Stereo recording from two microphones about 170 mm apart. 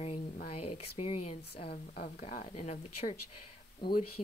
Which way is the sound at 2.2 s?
45° left (ahead or behind).